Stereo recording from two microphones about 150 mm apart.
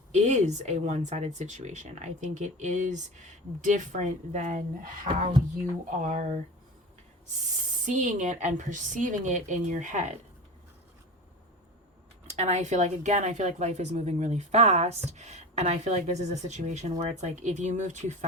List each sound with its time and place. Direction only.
0.1 s speech: 50° right (ahead or behind)
7.9 s a woman's voice: 55° right (ahead or behind)
12.3 s speech: 50° right (ahead or behind)